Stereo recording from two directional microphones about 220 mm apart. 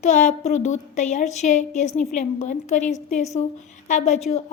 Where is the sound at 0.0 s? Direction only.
35° left (ahead or behind).